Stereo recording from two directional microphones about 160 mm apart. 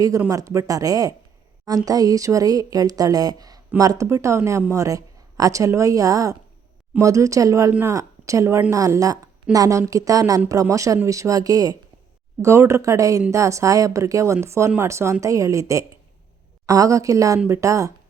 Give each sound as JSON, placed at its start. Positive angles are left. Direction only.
{"t": 0.3, "sound": "a woman's voice", "side_deg": -20}